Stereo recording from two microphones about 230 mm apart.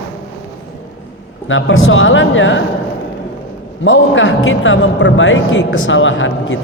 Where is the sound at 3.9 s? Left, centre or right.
Left.